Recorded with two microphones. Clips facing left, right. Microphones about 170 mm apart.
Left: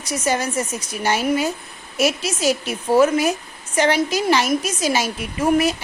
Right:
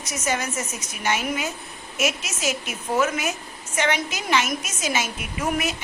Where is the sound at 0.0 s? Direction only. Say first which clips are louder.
Left 5 dB; 35° left (ahead or behind).